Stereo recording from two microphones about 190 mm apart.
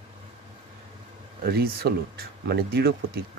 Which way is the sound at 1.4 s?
55° right (ahead or behind).